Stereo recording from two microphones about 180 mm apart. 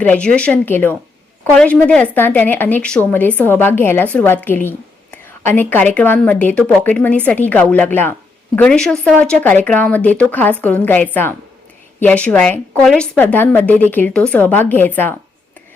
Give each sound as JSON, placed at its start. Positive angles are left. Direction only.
{"t": 0.0, "sound": "a woman's voice", "side_deg": 5}